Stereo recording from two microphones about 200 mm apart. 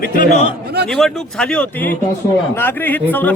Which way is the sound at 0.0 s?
50° left (ahead or behind).